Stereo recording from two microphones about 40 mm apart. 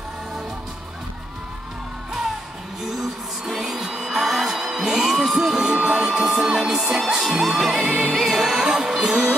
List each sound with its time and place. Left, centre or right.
2.8 s music: centre
5.6 s music: right